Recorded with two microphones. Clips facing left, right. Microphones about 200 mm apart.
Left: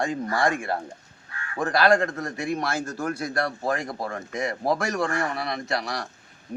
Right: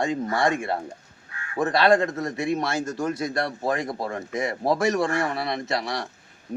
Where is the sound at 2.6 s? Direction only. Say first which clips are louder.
Right 2 dB; 20° right (ahead or behind).